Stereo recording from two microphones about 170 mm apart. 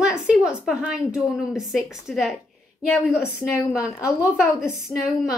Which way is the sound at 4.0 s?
20° left (ahead or behind).